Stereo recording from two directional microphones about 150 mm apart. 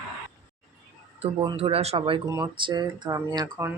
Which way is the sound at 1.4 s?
40° right (ahead or behind).